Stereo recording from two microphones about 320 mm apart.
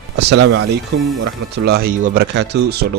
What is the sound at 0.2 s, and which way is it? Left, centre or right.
Speech, right.